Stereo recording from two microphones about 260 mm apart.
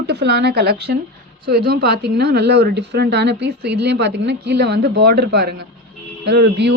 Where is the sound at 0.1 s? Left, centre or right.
Right.